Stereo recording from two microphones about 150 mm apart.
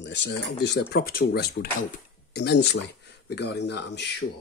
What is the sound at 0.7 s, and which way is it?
Speech, 90° left.